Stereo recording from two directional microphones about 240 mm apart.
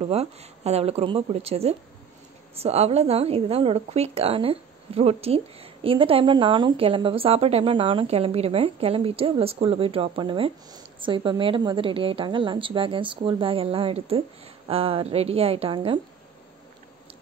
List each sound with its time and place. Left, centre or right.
0.0 s a woman's voice: right